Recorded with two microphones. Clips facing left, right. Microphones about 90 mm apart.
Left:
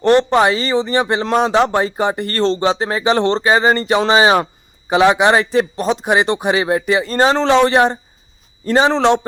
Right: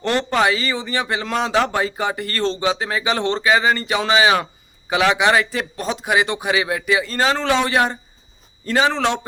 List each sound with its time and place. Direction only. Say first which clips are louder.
0.2 s speech: left 5 dB; 25° left (ahead or behind)